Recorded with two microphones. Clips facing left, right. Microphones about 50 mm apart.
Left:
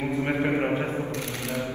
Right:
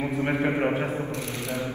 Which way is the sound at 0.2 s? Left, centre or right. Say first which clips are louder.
Right 1 dB; right.